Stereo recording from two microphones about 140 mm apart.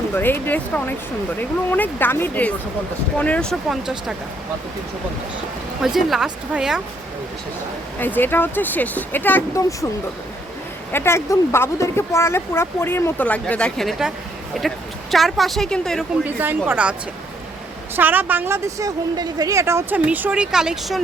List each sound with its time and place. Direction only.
0.1 s speech: 15° left (ahead or behind); by 4.1 s centre (ahead or behind)
5.8 s speech: 5° right (ahead or behind)
7.9 s speech: 15° left (ahead or behind)
10.9 s speech: 15° left (ahead or behind)
16.2 s speech: 15° right (ahead or behind)
17.9 s a woman's voice: 15° right (ahead or behind)